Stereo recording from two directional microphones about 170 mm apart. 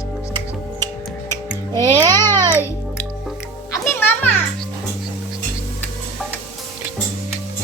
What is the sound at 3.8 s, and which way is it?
Music, 10° left (ahead or behind).